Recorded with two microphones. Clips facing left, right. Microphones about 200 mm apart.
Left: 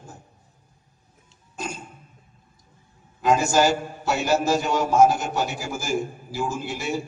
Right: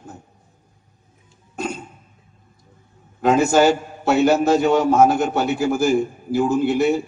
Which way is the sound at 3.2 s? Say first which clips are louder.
Right 5 dB; 60° right (ahead or behind).